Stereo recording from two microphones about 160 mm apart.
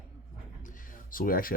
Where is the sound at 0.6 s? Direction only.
55° left (ahead or behind).